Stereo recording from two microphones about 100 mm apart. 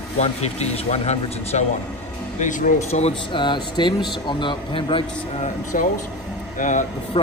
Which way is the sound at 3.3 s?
50° left (ahead or behind).